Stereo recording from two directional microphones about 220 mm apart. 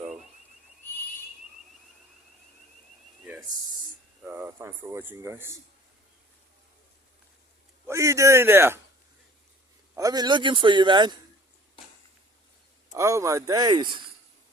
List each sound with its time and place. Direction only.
4.2 s speech: 10° right (ahead or behind)
7.9 s speech: 15° right (ahead or behind)
9.9 s a man's voice: 15° right (ahead or behind)
12.9 s speech: 15° right (ahead or behind)